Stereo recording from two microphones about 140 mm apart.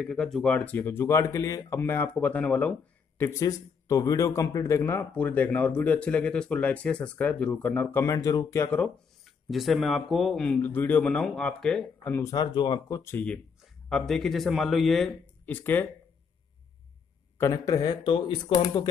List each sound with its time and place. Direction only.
0.0 s speech: 5° left (ahead or behind)
3.2 s a man's voice: 20° left (ahead or behind)
9.2 s speech: centre (ahead or behind)
15.4 s speech: 15° left (ahead or behind)
17.4 s speech: 25° left (ahead or behind)